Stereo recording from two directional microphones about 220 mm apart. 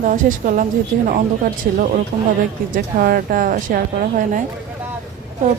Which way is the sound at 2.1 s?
35° right (ahead or behind).